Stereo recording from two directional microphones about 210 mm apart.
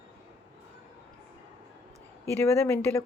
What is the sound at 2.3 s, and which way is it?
Speech, 15° left (ahead or behind).